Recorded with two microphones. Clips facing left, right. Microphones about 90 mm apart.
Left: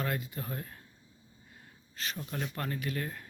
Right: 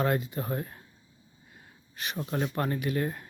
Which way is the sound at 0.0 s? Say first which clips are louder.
Right 7 dB; 25° right (ahead or behind).